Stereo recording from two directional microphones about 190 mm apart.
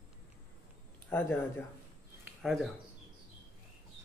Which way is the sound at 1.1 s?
10° left (ahead or behind).